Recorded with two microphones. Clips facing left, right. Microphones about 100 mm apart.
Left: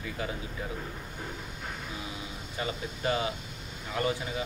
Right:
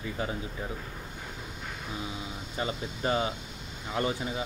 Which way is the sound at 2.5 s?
30° right (ahead or behind).